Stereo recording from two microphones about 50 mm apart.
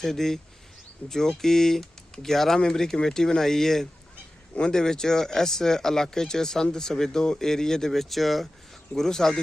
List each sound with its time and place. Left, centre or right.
0.0 s speech: centre
1.0 s speech: left
1.4 s speech: centre